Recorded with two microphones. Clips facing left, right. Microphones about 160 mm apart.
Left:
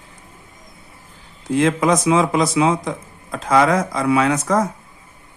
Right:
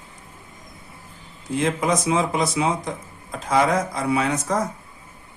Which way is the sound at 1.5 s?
90° left.